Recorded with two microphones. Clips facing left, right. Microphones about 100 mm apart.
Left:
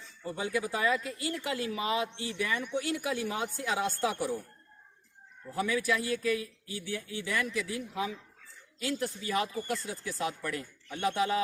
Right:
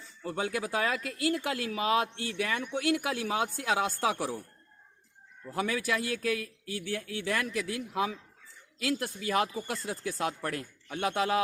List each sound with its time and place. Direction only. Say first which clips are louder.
0.3 s speech: even; 70° right (ahead or behind)
5.5 s speech: left 1 dB; 60° right (ahead or behind)